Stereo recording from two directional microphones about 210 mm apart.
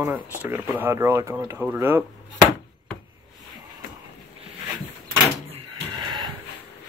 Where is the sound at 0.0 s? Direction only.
10° right (ahead or behind).